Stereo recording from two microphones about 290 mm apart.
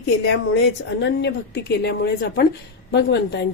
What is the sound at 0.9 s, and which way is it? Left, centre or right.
A woman's voice, left.